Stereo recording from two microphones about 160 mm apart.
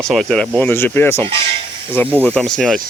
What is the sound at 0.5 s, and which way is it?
Speech, 15° left (ahead or behind).